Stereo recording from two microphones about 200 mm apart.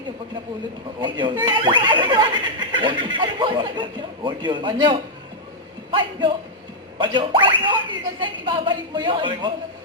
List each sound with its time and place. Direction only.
1.0 s speech: 25° right (ahead or behind)